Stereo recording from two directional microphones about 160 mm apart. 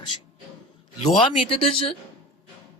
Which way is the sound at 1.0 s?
35° left (ahead or behind).